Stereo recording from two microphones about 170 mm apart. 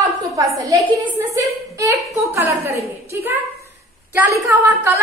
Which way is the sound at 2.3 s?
15° right (ahead or behind).